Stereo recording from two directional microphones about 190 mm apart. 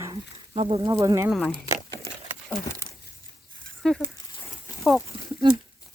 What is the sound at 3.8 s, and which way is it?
Speech, centre (ahead or behind).